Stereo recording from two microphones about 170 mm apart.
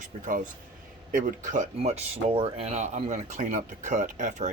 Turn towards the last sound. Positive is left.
turn(degrees=-50)  # may be behind; listen again after turning